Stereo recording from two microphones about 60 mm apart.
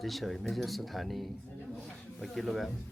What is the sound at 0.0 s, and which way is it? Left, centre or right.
Speech, centre.